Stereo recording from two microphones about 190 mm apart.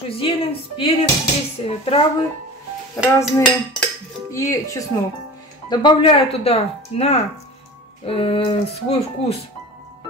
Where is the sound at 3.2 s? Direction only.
Centre (ahead or behind).